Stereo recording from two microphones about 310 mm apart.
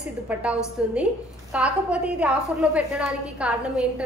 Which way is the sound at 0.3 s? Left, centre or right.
Centre.